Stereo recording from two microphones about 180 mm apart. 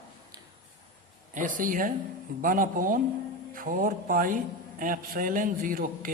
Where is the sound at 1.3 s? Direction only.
50° right (ahead or behind).